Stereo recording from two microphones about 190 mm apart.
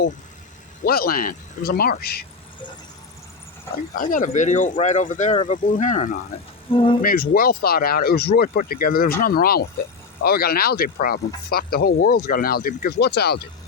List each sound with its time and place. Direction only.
0.9 s speech: 50° left (ahead or behind)
3.9 s speech: 45° left (ahead or behind)
6.7 s speech: 30° left (ahead or behind)
7.0 s speech: 50° left (ahead or behind)